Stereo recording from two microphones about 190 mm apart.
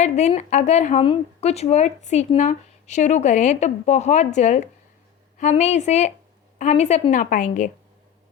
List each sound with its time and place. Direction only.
0.0 s a woman's voice: 35° left (ahead or behind)